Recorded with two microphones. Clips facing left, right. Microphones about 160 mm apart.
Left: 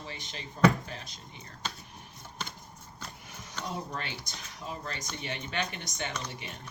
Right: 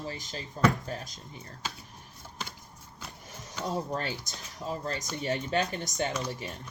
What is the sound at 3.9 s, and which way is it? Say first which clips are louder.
Speech: right 5 dB; 40° right (ahead or behind).